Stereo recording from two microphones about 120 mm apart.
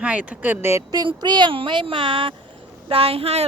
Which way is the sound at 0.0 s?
10° right (ahead or behind).